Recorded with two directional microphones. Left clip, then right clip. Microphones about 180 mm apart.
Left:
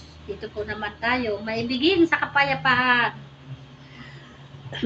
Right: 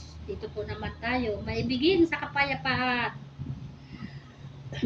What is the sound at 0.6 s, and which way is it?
A woman's voice, 15° right (ahead or behind).